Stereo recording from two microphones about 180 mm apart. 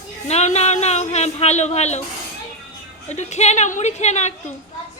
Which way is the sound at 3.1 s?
40° left (ahead or behind).